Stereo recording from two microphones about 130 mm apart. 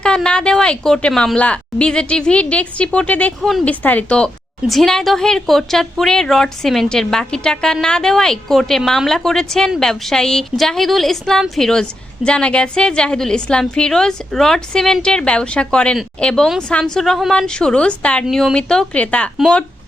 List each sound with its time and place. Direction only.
0.0 s a woman's voice: 5° left (ahead or behind)